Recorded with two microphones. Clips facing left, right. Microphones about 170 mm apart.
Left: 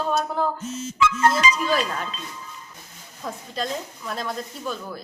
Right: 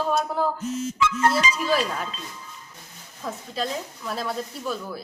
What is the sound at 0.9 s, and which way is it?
Music, 90° left.